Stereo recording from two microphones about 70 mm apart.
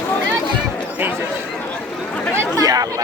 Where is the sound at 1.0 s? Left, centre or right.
Right.